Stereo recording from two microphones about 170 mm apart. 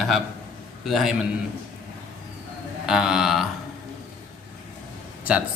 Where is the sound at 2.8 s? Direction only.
5° right (ahead or behind).